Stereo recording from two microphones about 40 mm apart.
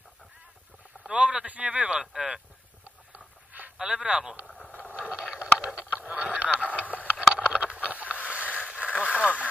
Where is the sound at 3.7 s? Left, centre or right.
Right.